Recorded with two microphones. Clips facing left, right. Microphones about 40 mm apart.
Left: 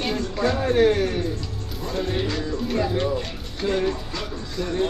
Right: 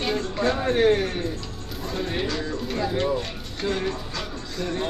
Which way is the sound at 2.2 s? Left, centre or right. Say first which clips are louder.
Left 2 dB; centre.